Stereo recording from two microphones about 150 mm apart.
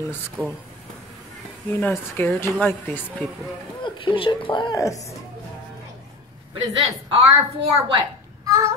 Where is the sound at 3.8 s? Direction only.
35° left (ahead or behind).